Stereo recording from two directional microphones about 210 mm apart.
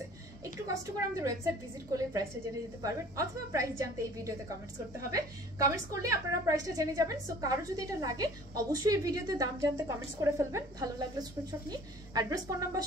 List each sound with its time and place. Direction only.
0.9 s a woman's voice: 15° right (ahead or behind)